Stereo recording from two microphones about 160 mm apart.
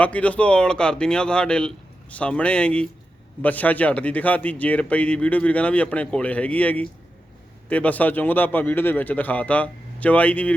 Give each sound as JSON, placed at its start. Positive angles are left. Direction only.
{"t": 0.0, "sound": "a man's voice", "side_deg": 10}